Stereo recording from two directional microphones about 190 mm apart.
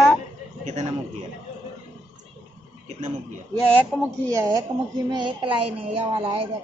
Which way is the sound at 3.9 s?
Centre (ahead or behind).